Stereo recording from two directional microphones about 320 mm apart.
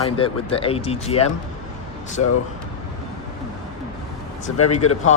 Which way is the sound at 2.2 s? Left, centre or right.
Left.